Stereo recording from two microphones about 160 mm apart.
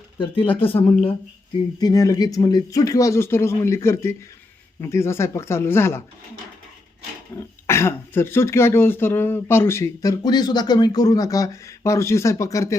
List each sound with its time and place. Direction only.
0.2 s speech: 35° left (ahead or behind)
1.8 s speech: 20° left (ahead or behind)
7.3 s speech: 15° left (ahead or behind)